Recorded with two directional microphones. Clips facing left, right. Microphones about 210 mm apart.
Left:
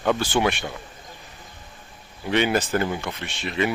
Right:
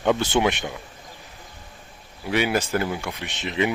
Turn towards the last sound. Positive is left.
turn(degrees=-20)  # may be behind; listen again after turning